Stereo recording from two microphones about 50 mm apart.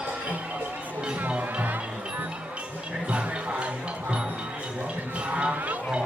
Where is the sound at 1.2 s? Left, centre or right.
Right.